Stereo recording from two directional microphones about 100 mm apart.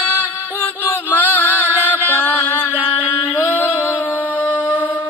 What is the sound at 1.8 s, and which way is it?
Music, 20° left (ahead or behind).